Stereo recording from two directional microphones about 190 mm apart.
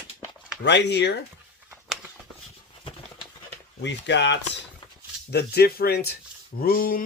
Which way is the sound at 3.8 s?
65° left (ahead or behind).